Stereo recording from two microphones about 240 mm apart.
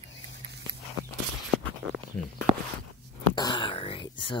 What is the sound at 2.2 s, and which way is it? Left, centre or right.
Speech, centre.